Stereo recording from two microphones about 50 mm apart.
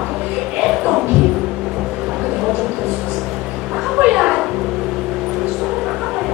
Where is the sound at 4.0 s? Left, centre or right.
Centre.